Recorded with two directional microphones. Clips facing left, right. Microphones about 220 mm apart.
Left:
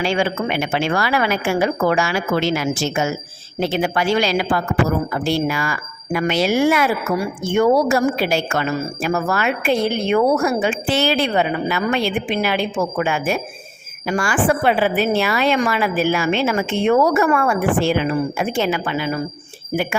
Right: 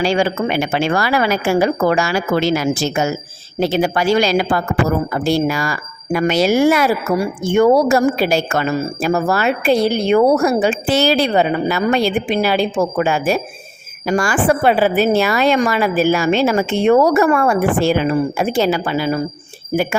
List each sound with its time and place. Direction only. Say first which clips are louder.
0.0 s a woman's voice: right 3 dB; 35° right (ahead or behind)